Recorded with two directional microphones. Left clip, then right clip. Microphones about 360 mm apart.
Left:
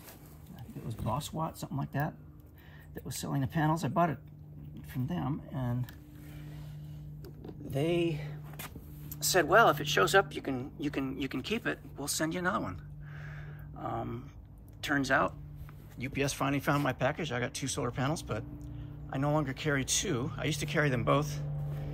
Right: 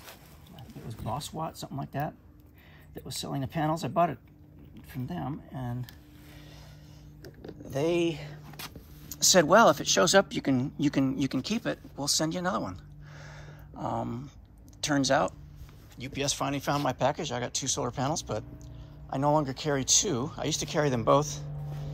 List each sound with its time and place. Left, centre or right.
1.0 s speech: centre
7.7 s speech: centre